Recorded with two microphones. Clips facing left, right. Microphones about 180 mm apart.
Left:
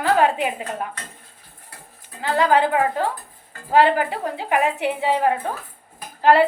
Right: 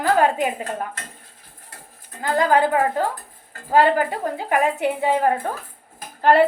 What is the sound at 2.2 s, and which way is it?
Speech, 45° right (ahead or behind).